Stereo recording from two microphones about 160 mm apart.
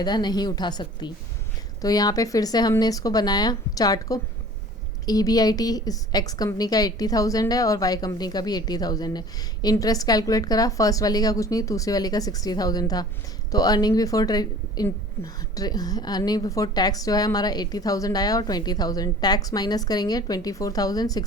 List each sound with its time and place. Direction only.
0.0 s a woman's voice: 25° left (ahead or behind)